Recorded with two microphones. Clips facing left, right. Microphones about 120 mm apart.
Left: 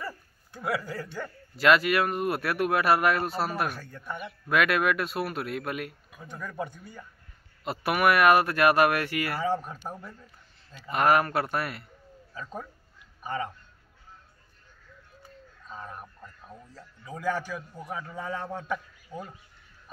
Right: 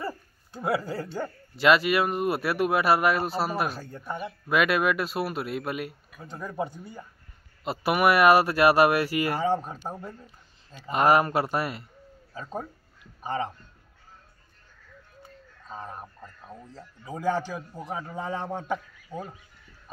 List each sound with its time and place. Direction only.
0.0 s speech: 25° right (ahead or behind)
15.7 s speech: 30° right (ahead or behind)